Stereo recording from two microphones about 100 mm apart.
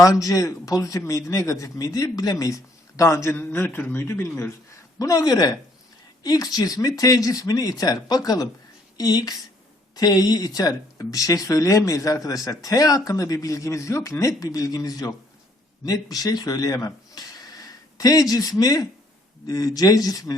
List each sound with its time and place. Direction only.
0.0 s a man's voice: 35° left (ahead or behind)
4.9 s speech: 35° left (ahead or behind)